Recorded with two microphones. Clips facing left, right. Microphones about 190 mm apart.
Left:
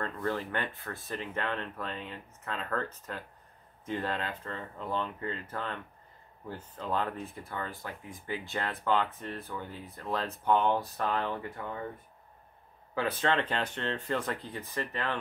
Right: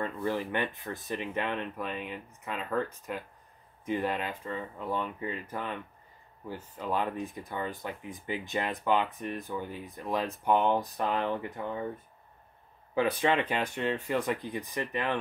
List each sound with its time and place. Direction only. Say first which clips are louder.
0.0 s speech: right 2 dB; 10° right (ahead or behind)
12.9 s speech: right 3 dB; 15° right (ahead or behind)